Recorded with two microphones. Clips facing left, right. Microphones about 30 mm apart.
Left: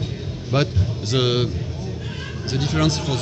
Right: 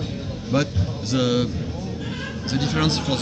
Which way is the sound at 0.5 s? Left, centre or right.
Left.